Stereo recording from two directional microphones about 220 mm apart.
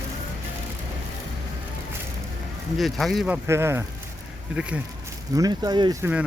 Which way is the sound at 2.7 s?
Centre (ahead or behind).